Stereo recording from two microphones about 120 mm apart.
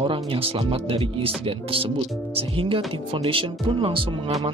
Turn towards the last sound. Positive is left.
turn(degrees=-50)  # may be behind; listen again after turning